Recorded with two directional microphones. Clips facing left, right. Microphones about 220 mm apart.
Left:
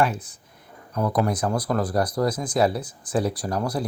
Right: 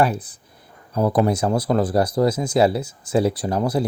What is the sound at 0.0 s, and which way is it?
Speech, 35° right (ahead or behind).